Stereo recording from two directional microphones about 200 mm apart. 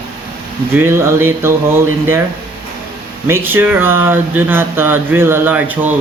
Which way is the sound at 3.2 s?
10° right (ahead or behind).